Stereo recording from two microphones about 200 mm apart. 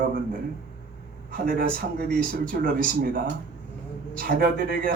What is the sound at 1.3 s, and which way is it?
Speech, 45° right (ahead or behind).